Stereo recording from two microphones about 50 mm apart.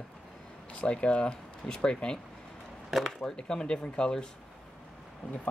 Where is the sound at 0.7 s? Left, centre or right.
Left.